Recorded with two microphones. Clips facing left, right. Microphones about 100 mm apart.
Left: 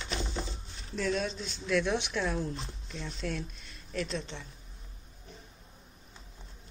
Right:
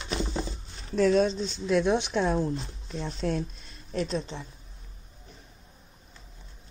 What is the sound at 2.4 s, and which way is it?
Speech, 40° right (ahead or behind).